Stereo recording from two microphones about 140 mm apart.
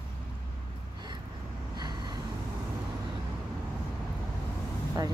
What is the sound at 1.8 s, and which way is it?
Vehicle, 30° right (ahead or behind).